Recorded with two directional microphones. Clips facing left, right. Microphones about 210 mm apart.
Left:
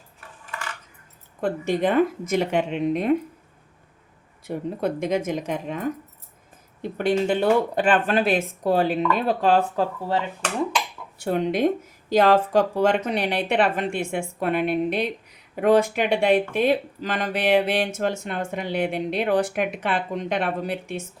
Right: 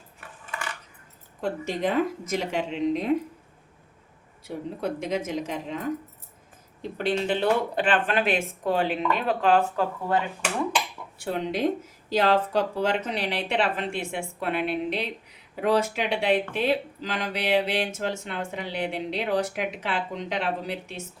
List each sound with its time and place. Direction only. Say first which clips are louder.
1.4 s speech: left 5 dB; 55° left (ahead or behind)
4.4 s speech: left 4 dB; 50° left (ahead or behind)
6.9 s speech: left 4 dB; 50° left (ahead or behind); by 10.2 s 30° left (ahead or behind)
11.2 s speech: left 5 dB; 50° left (ahead or behind)